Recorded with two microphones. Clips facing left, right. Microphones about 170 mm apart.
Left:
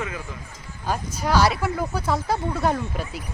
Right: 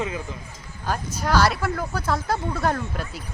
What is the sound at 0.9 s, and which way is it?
Speech, 5° left (ahead or behind).